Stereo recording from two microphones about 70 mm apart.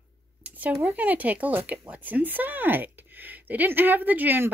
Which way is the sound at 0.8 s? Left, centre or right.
Right.